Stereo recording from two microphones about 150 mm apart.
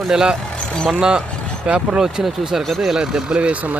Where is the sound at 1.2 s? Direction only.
10° left (ahead or behind).